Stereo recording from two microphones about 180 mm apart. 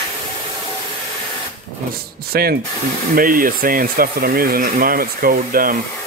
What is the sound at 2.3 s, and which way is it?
Speech, 60° right (ahead or behind).